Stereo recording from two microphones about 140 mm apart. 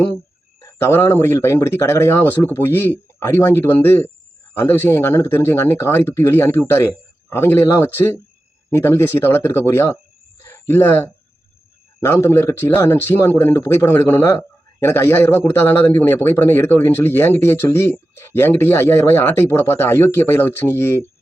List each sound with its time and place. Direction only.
0.6 s speech: 20° left (ahead or behind)